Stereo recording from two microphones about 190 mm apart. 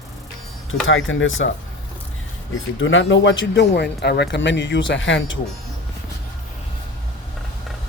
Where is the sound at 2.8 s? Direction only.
90° left.